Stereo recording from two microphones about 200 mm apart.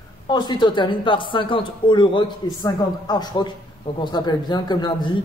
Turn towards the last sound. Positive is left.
turn(degrees=20)  # may be behind; listen again after turning